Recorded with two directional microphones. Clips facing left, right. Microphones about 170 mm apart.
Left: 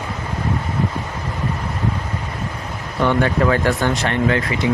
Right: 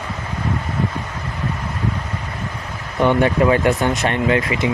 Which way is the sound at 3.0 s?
20° right (ahead or behind).